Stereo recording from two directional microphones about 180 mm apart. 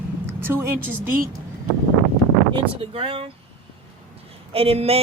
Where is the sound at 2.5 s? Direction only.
30° right (ahead or behind).